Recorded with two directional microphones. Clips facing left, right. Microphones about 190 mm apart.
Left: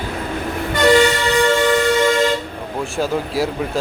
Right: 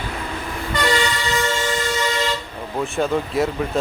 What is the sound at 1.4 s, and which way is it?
Music, 55° left (ahead or behind).